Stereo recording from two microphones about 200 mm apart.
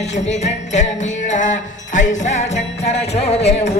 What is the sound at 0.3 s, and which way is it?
Music, 35° left (ahead or behind).